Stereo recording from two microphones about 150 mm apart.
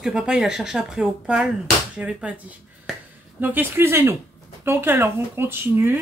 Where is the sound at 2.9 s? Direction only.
Centre (ahead or behind).